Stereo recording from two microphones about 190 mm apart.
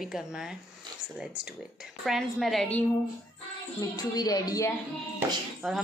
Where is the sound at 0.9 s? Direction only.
25° right (ahead or behind).